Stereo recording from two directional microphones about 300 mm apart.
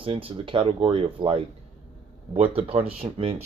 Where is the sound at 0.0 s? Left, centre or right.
Centre.